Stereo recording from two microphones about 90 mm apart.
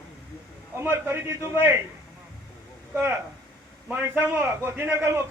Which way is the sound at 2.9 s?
20° right (ahead or behind).